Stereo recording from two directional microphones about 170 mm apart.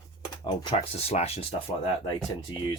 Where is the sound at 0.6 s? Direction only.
35° left (ahead or behind).